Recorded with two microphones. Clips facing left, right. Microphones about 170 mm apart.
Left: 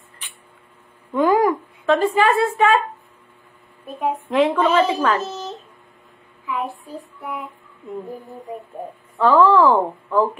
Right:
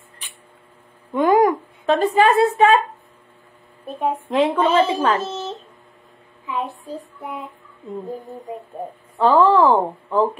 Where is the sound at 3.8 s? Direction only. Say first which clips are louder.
Right 1 dB; 30° right (ahead or behind).